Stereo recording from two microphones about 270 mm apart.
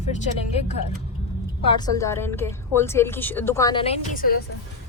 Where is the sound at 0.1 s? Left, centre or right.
Left.